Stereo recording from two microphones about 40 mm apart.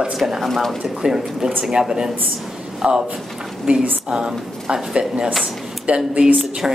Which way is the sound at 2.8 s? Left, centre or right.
Right.